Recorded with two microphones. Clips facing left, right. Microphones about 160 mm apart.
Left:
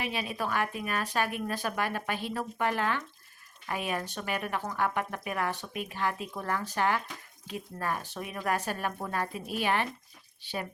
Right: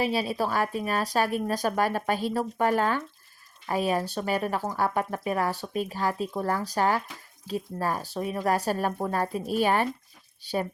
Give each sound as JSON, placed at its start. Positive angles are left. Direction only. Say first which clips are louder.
{"t": 0.0, "sound": "speech", "louder": "right 7 dB", "side_deg": -35}